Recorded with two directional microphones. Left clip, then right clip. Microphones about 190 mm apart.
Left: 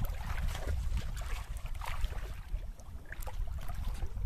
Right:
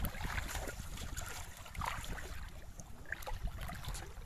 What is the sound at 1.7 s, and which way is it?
Boat, centre (ahead or behind).